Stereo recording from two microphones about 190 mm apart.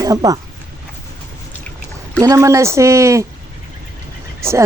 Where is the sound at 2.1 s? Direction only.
15° right (ahead or behind).